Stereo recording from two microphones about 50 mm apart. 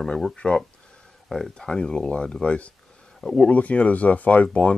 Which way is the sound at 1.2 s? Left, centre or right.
Centre.